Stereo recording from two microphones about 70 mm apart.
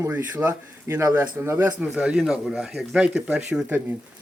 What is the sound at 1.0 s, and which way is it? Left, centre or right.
Speech, right.